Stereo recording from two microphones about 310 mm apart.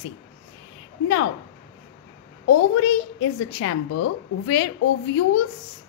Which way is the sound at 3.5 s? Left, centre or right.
Left.